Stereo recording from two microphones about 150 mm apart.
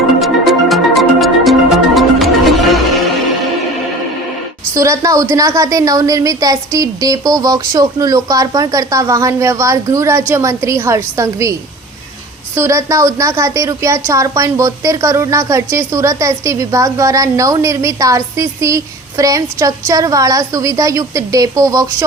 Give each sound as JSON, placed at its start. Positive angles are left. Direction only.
{"t": 0.2, "sound": "music", "side_deg": 0}
{"t": 4.7, "sound": "a woman's voice", "side_deg": -20}
{"t": 12.5, "sound": "a woman's voice", "side_deg": -20}